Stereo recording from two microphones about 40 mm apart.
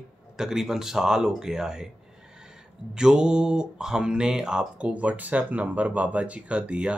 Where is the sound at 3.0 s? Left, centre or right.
Centre.